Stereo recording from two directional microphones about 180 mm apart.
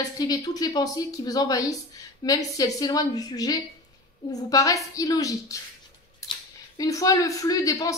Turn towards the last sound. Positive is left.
turn(degrees=20)  # may be behind; listen again after turning